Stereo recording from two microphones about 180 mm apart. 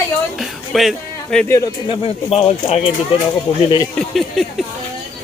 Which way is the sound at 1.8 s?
30° left (ahead or behind).